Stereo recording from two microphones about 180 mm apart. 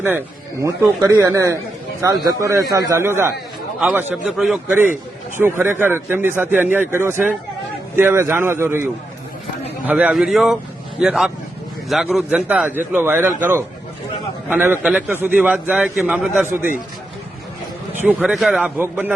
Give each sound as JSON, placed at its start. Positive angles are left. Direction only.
{"t": 0.6, "sound": "a man's voice", "side_deg": -15}
{"t": 9.8, "sound": "a man's voice", "side_deg": -5}
{"t": 18.0, "sound": "a man's voice", "side_deg": -5}